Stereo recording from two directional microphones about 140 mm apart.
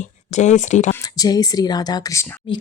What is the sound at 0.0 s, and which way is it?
Speech, 60° left (ahead or behind).